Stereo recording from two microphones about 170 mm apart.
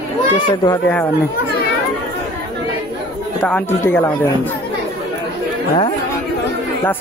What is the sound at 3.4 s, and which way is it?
Speech, 15° left (ahead or behind).